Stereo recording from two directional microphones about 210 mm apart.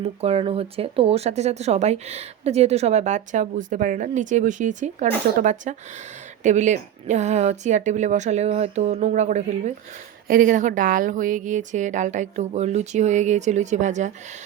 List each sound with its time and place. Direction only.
0.0 s speech: 30° right (ahead or behind)